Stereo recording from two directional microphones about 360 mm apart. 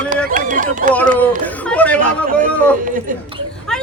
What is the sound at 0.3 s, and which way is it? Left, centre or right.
Run, right.